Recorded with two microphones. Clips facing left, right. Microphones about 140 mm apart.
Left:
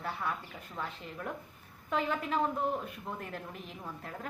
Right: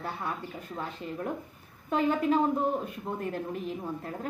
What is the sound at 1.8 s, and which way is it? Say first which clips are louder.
Speech: right 7 dB; 35° right (ahead or behind).